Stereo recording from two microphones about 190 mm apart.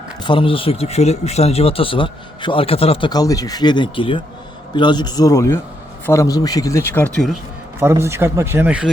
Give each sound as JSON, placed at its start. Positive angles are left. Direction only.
{"t": 0.2, "sound": "speech", "side_deg": 25}
{"t": 7.8, "sound": "speech", "side_deg": -15}